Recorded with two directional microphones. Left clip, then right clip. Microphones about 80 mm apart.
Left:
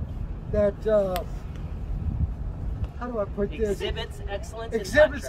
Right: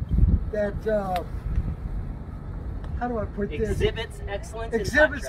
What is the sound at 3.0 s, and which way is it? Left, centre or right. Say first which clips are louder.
Speech: even; left.